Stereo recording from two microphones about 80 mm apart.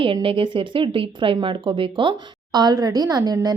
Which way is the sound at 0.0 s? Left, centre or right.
Right.